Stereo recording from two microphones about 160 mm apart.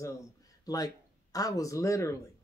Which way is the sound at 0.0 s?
20° left (ahead or behind).